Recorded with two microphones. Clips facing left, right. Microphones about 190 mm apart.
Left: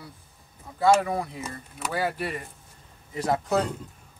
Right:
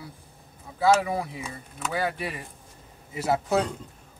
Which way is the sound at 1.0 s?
5° right (ahead or behind).